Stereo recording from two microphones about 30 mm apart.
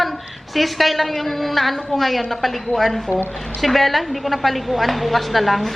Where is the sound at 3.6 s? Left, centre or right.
Centre.